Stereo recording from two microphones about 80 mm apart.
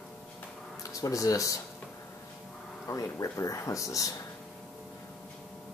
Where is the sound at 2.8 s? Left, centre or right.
Left.